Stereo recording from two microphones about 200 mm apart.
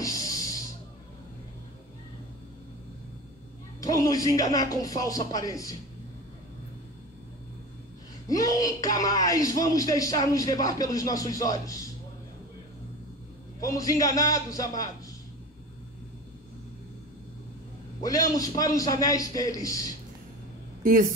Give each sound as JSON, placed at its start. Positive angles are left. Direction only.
{"t": 0.0, "sound": "music", "side_deg": 15}
{"t": 3.8, "sound": "speech", "side_deg": 15}
{"t": 8.3, "sound": "speech", "side_deg": 15}
{"t": 13.6, "sound": "speech", "side_deg": 15}
{"t": 18.0, "sound": "speech", "side_deg": 15}